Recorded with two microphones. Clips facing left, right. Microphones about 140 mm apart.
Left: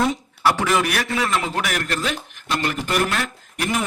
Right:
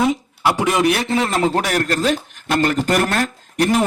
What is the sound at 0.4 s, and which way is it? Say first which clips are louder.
A man's voice: right 3 dB; 20° right (ahead or behind).